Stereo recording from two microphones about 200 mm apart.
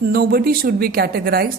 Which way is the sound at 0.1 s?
50° right (ahead or behind).